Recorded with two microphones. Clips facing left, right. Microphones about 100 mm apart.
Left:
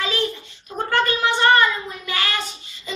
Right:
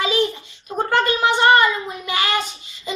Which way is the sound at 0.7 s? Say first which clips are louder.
Right 2 dB; 20° right (ahead or behind).